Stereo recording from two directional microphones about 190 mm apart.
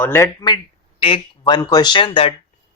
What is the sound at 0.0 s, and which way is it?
Speech, 15° left (ahead or behind).